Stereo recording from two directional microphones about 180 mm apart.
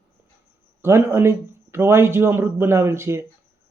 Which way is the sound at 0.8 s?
15° right (ahead or behind).